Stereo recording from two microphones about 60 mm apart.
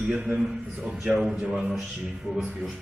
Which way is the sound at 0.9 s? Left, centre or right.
Centre.